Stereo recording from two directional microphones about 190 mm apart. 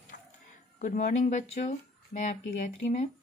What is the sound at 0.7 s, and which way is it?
Speech, 40° left (ahead or behind).